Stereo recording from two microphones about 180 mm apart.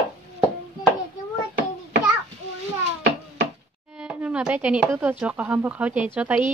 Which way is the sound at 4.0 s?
5° right (ahead or behind).